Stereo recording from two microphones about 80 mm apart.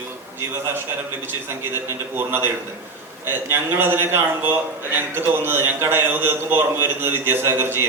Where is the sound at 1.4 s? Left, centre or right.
Right.